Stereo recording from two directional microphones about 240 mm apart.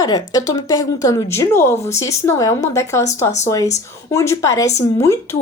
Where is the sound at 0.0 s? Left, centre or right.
Centre.